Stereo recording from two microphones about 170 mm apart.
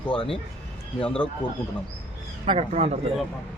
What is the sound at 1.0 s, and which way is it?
Speech, 5° left (ahead or behind).